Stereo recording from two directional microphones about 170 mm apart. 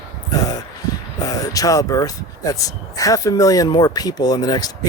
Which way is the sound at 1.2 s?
20° left (ahead or behind).